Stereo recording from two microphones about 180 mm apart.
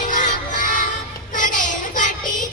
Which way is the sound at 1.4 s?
45° left (ahead or behind).